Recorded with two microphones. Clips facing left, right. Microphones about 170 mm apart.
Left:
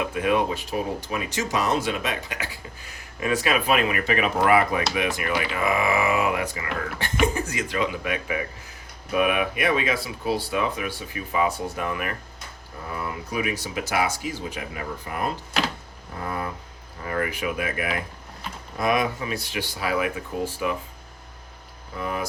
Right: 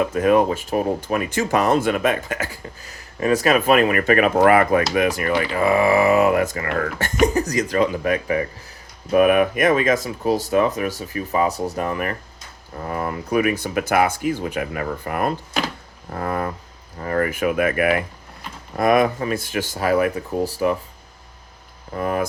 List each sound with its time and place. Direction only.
0.1 s speech: 40° right (ahead or behind)
7.3 s speech: 40° right (ahead or behind)
12.9 s speech: 50° right (ahead or behind)
17.0 s speech: 45° right (ahead or behind); by 18.0 s 60° right (ahead or behind)
18.8 s speech: 50° right (ahead or behind)
21.9 s speech: 50° right (ahead or behind)